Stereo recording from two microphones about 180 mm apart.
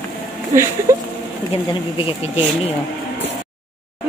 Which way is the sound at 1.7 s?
30° left (ahead or behind).